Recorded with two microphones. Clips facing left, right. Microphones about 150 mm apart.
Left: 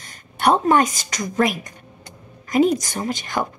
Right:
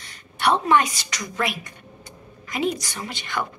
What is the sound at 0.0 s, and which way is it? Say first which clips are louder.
A woman's voice: left 4 dB; 45° left (ahead or behind).